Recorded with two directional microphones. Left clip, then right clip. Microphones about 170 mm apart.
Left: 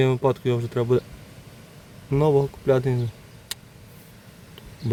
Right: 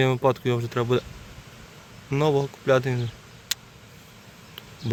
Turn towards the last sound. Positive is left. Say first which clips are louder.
# right 4 dB
turn(degrees=20)  # may be behind; listen again after turning